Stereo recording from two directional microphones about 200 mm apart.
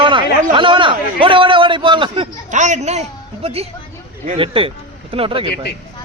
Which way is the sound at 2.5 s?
35° right (ahead or behind).